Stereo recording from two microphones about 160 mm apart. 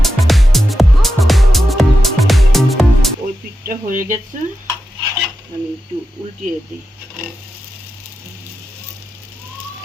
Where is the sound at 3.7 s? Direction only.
60° right (ahead or behind).